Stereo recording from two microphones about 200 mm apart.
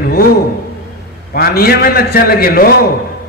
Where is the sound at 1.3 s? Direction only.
50° left (ahead or behind).